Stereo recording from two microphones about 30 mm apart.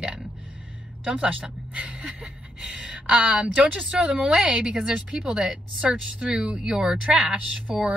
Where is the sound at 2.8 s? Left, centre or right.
Right.